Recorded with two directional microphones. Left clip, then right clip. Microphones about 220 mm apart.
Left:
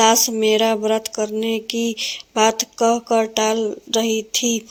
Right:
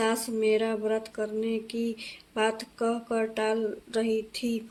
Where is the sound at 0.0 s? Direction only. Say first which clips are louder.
Left 12 dB; 35° left (ahead or behind).